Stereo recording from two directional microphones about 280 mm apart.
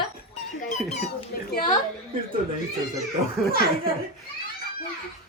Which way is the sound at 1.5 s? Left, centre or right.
Left.